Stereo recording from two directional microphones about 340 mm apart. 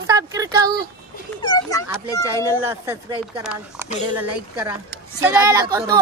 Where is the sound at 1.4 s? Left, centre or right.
Centre.